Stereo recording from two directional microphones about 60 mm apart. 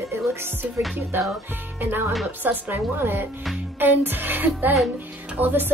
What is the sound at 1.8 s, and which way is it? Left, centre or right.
Speech, right.